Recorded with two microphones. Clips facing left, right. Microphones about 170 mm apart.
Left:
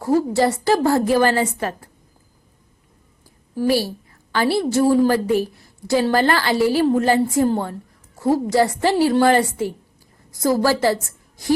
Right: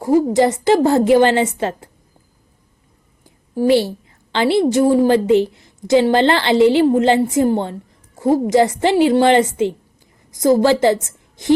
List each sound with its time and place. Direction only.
0.0 s a woman's voice: 15° right (ahead or behind)
3.7 s a woman's voice: 25° right (ahead or behind)